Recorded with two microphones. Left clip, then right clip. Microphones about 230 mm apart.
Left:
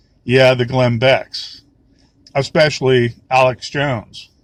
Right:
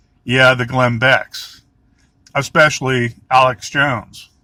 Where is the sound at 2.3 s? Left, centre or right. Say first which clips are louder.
Right 2 dB; right.